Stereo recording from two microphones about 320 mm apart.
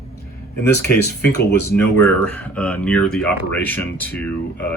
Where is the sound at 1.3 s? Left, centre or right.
Left.